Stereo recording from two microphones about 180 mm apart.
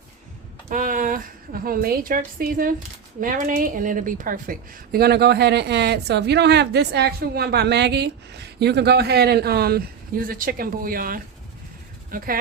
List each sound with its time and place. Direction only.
0.7 s a woman's voice: 50° right (ahead or behind)